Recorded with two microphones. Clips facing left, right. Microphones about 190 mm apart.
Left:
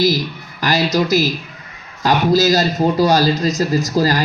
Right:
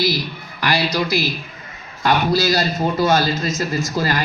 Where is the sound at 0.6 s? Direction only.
45° left (ahead or behind).